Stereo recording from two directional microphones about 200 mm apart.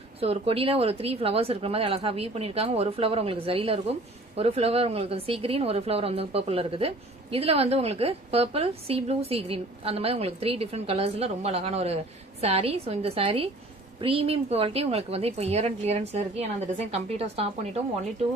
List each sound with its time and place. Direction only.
0.2 s a woman's voice: 30° right (ahead or behind)